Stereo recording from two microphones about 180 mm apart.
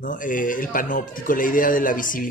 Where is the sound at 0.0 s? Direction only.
45° left (ahead or behind).